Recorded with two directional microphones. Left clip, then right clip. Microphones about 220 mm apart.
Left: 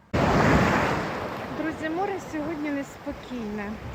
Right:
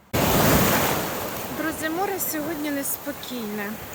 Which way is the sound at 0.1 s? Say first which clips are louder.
Right 1 dB; 55° right (ahead or behind).